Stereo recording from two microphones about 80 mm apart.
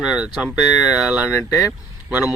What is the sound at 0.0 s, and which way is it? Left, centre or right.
Speech, centre.